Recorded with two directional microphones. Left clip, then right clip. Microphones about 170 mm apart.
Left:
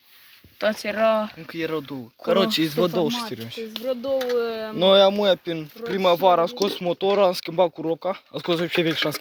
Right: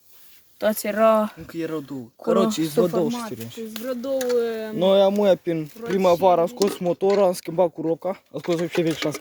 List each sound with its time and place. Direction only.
0.7 s speech: 45° right (ahead or behind)
1.5 s speech: 10° right (ahead or behind)
2.8 s speech: centre (ahead or behind)
3.8 s speech: 50° right (ahead or behind)
4.8 s speech: 20° right (ahead or behind)
5.1 s speech: 45° right (ahead or behind)
6.8 s speech: 30° right (ahead or behind)